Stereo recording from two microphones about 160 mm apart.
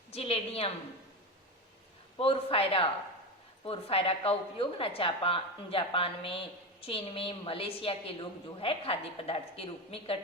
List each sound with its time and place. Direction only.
0.1 s a woman's voice: 40° left (ahead or behind)
2.1 s a woman's voice: 35° left (ahead or behind)